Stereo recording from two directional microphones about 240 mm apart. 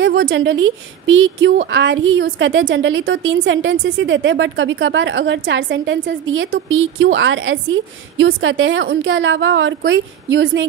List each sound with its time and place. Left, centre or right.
0.0 s a woman's voice: right